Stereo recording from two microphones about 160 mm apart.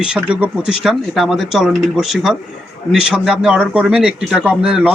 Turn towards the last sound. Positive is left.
turn(degrees=-5)  # may be behind; listen again after turning